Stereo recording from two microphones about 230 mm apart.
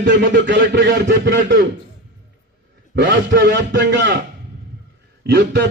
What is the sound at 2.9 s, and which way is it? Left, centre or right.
A man's voice, right.